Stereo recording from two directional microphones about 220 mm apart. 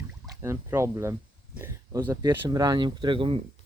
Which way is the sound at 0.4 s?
10° right (ahead or behind).